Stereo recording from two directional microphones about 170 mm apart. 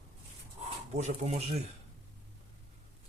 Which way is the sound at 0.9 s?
40° right (ahead or behind).